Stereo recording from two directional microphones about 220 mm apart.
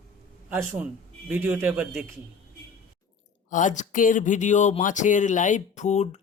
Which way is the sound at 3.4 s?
35° left (ahead or behind).